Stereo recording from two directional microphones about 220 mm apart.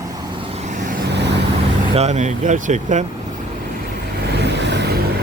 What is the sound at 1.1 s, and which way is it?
Vehicle, 50° right (ahead or behind).